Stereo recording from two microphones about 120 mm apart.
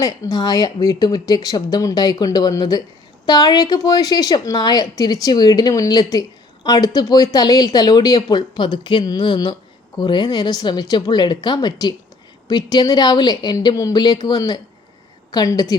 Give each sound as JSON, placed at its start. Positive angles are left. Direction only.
{"t": 0.0, "sound": "a woman's voice", "side_deg": 30}